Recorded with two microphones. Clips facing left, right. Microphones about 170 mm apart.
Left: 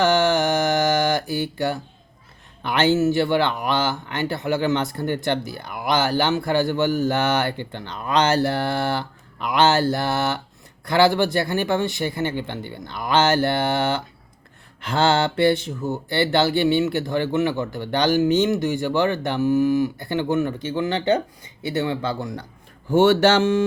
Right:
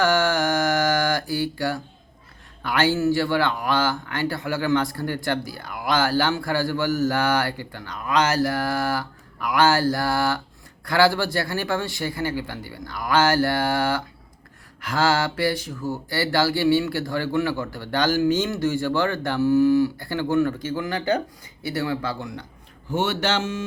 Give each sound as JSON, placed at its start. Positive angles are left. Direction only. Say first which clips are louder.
{"t": 0.0, "sound": "mantra", "louder": "left 2 dB", "side_deg": 20}
{"t": 2.6, "sound": "speech", "louder": "left 3 dB", "side_deg": 20}
{"t": 22.2, "sound": "a man's voice", "louder": "left 4 dB", "side_deg": 40}
{"t": 22.9, "sound": "speech", "louder": "left 8 dB", "side_deg": 50}